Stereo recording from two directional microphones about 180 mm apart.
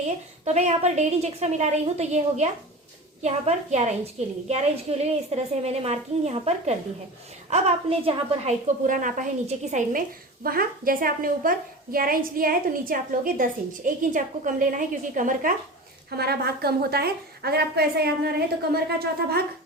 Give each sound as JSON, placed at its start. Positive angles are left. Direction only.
{"t": 0.4, "sound": "a woman's voice", "side_deg": -40}
{"t": 10.4, "sound": "a woman's voice", "side_deg": -55}
{"t": 16.0, "sound": "a woman's voice", "side_deg": -60}